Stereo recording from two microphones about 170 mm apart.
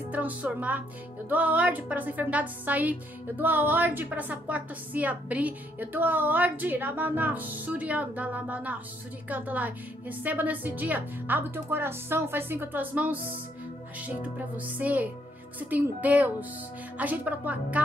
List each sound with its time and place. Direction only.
0.1 s a woman's voice: 10° right (ahead or behind)